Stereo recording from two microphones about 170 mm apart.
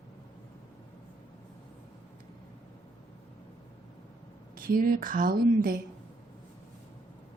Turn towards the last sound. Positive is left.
turn(degrees=-60)  # may be behind; listen again after turning